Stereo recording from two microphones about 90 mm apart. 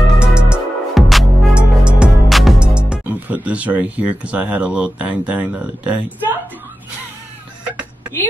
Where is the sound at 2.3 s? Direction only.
Centre (ahead or behind).